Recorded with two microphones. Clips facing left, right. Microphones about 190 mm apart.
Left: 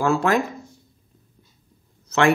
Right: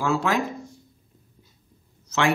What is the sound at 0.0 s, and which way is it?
Speech, 50° left (ahead or behind).